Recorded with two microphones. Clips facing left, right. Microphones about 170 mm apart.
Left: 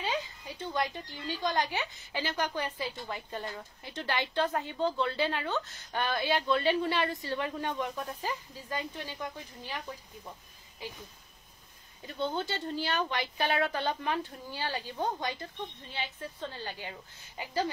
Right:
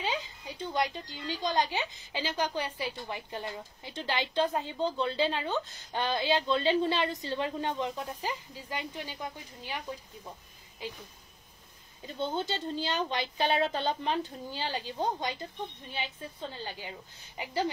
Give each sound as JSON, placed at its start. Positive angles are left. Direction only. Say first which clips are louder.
{"t": 0.6, "sound": "a woman's voice", "louder": "right 2 dB", "side_deg": -20}
{"t": 12.0, "sound": "a woman's voice", "louder": "even", "side_deg": -20}